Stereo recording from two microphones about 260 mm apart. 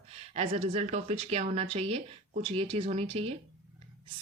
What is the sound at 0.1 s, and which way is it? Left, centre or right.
Speech, right.